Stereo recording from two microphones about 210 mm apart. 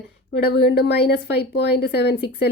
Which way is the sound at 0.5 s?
50° left (ahead or behind).